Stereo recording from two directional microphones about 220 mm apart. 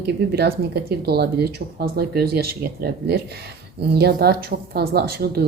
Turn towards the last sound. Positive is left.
turn(degrees=-45)  # may be behind; listen again after turning